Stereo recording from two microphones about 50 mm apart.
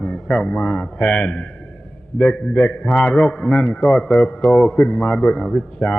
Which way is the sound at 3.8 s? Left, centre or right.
Centre.